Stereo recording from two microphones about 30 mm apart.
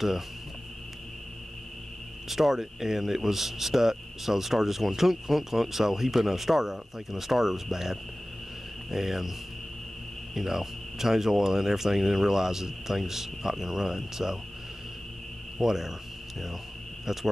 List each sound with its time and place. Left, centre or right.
2.2 s speech: centre
10.3 s speech: centre
15.5 s speech: centre
17.0 s speech: centre